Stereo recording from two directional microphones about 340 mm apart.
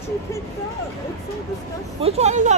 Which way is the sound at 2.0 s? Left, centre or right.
Centre.